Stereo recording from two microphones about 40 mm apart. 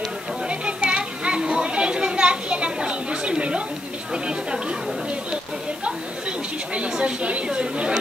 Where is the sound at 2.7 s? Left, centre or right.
Right.